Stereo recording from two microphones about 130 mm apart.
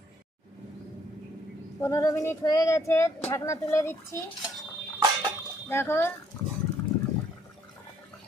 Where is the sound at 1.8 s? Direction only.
25° left (ahead or behind).